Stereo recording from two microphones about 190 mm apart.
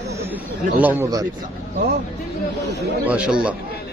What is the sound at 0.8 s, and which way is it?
Speech, 10° right (ahead or behind).